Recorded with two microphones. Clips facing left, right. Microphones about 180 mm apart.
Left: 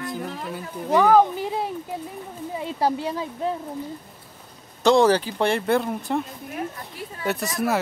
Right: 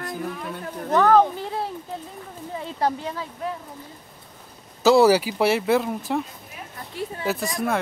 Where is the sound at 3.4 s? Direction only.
30° left (ahead or behind).